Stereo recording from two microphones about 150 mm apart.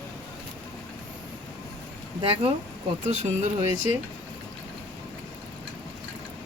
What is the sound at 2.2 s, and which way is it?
Speech, 40° right (ahead or behind).